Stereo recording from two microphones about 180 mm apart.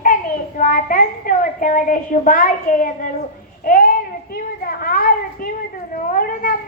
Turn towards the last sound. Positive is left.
turn(degrees=50)  # may be behind; listen again after turning